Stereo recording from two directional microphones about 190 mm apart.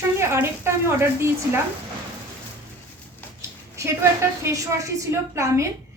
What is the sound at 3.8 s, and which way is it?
A woman's voice, 15° right (ahead or behind).